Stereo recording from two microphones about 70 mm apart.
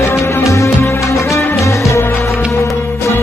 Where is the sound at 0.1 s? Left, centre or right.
Left.